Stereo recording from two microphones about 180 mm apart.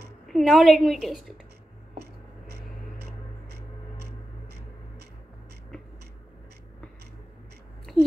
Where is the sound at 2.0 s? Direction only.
65° right (ahead or behind).